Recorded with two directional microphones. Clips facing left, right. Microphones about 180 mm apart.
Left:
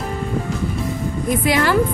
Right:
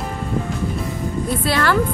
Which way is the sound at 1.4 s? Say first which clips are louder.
Left 2 dB; 15° left (ahead or behind).